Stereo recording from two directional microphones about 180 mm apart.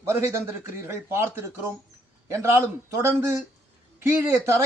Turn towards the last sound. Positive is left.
turn(degrees=-15)  # may be behind; listen again after turning